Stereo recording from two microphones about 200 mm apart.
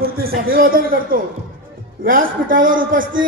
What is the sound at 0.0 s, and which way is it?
A man's voice, 45° right (ahead or behind).